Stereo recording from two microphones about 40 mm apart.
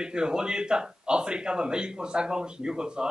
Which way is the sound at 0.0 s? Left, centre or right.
Right.